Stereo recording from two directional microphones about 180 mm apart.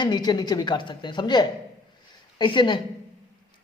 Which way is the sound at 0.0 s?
25° left (ahead or behind).